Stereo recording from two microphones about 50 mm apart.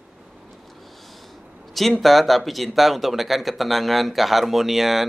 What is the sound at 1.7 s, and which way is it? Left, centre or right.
Speech, centre.